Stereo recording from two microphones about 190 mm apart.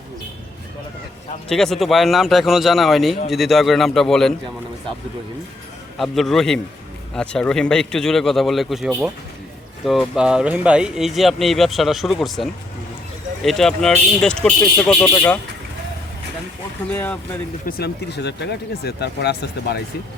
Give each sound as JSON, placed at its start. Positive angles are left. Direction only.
{"t": 1.5, "sound": "speech", "side_deg": 0}
{"t": 6.0, "sound": "speech", "side_deg": 0}
{"t": 16.9, "sound": "speech", "side_deg": 10}
{"t": 17.7, "sound": "speech", "side_deg": 55}